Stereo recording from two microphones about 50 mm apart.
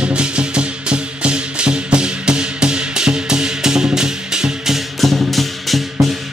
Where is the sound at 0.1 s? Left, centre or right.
Centre.